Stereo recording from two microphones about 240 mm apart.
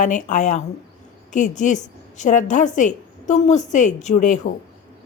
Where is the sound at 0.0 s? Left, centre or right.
Left.